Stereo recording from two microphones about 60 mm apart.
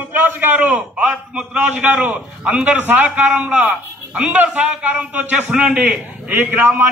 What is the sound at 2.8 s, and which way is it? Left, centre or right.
A man's voice, right.